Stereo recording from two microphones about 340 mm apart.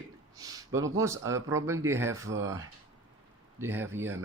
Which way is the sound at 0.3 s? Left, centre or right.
Centre.